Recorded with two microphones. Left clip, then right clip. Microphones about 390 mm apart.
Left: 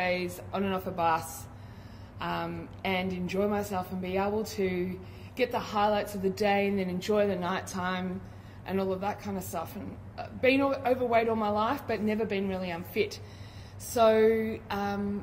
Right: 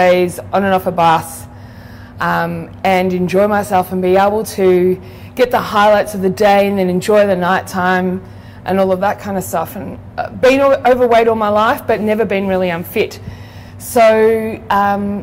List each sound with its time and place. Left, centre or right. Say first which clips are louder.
0.0 s a woman's voice: right 19 dB; right